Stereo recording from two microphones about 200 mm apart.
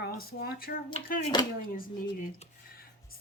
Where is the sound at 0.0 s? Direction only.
50° left (ahead or behind).